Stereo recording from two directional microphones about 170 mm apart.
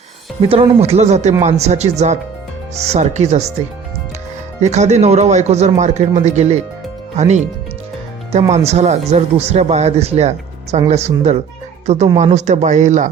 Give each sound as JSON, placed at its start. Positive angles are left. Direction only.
{"t": 0.4, "sound": "speech", "side_deg": -35}
{"t": 4.6, "sound": "speech", "side_deg": -40}